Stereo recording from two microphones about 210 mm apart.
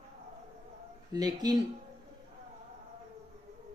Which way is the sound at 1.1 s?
20° right (ahead or behind).